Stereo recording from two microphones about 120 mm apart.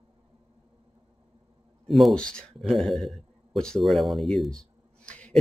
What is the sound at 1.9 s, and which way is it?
A man's voice, centre (ahead or behind).